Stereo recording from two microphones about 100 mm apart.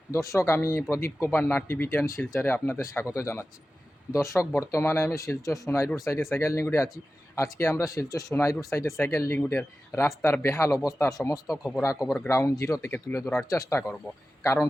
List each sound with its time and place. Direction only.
0.1 s speech: 30° left (ahead or behind)